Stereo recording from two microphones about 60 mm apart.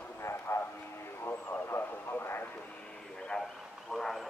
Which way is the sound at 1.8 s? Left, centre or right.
Left.